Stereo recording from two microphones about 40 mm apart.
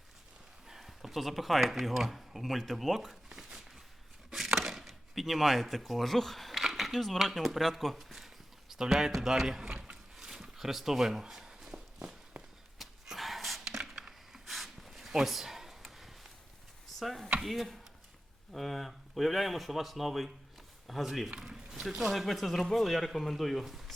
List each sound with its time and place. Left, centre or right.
0.7 s speech: centre
3.2 s a sound: centre
4.3 s chopping: centre
4.5 s speech: centre
8.7 s speech: centre
9.7 s a sound: right
10.2 s zipper: centre
11.4 s walk: centre
12.8 s a sound: centre
17.0 s chop: centre
17.4 s speech: centre